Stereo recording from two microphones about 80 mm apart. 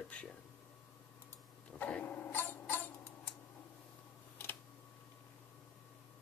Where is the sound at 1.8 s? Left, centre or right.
Centre.